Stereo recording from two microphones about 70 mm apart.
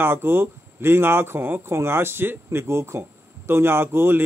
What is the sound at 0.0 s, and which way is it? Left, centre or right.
Speech, right.